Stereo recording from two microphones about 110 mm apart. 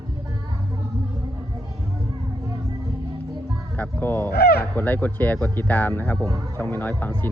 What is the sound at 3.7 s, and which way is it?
Speech, 15° left (ahead or behind).